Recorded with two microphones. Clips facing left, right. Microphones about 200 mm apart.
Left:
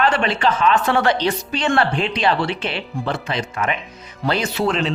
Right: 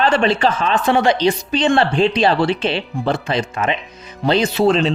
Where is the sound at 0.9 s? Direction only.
15° right (ahead or behind).